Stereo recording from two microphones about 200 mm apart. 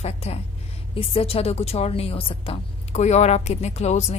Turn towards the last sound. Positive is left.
turn(degrees=35)  # may be behind; listen again after turning